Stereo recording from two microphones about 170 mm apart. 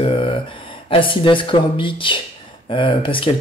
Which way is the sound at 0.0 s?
30° left (ahead or behind).